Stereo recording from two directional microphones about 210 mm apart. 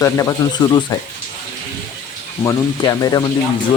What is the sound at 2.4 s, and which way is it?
Speech, 20° left (ahead or behind).